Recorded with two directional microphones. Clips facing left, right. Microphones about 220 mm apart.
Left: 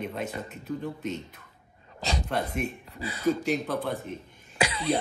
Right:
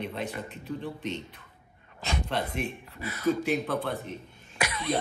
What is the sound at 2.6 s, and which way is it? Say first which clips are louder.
Speech: left 1 dB; 30° left (ahead or behind).